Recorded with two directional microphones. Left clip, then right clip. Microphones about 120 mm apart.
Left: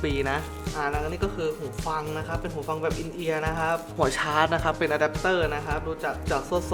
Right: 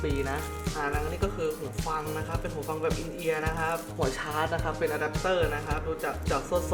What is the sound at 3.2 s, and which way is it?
Speech, 35° left (ahead or behind).